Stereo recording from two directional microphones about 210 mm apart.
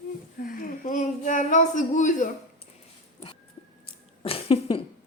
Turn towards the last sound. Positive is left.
turn(degrees=25)  # may be behind; listen again after turning